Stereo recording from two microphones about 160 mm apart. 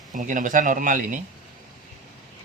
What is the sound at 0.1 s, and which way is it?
Speech, 55° right (ahead or behind).